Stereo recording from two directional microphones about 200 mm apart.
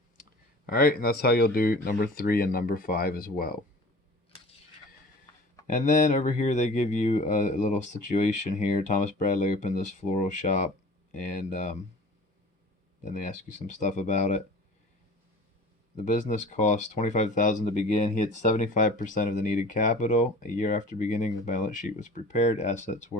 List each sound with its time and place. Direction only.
0.6 s speech: 45° left (ahead or behind)
5.6 s speech: 40° left (ahead or behind)
13.0 s speech: 40° left (ahead or behind)
16.0 s speech: 40° left (ahead or behind)